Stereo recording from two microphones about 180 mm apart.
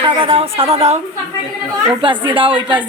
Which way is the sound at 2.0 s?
30° right (ahead or behind).